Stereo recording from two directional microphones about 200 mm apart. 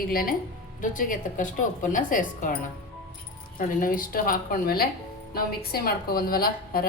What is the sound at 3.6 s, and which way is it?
A woman's voice, 45° left (ahead or behind).